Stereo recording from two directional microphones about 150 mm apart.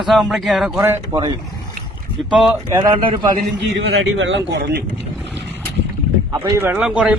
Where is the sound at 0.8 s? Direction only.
15° right (ahead or behind).